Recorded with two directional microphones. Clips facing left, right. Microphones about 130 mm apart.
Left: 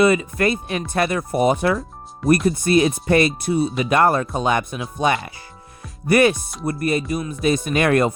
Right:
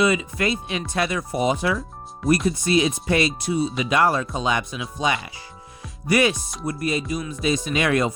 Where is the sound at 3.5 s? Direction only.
Centre (ahead or behind).